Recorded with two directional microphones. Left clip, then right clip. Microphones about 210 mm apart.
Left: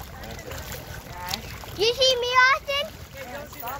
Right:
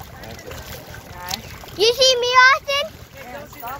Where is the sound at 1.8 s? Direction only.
50° right (ahead or behind).